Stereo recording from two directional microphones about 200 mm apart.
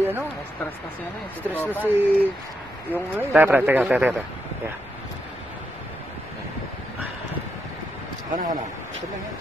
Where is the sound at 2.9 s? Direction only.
10° right (ahead or behind).